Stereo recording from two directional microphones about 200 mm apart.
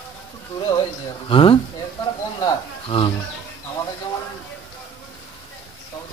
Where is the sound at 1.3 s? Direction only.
25° left (ahead or behind).